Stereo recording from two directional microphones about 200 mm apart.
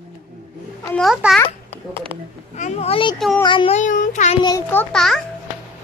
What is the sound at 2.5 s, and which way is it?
A child's voice, 35° left (ahead or behind).